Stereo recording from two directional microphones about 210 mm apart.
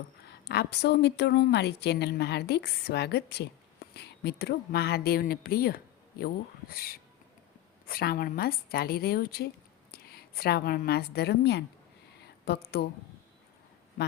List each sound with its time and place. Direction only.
0.3 s a woman's voice: 50° left (ahead or behind)